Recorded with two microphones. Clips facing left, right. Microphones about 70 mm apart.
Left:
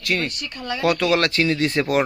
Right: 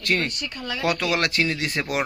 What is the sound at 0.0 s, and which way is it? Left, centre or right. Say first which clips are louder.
Speech: even; right.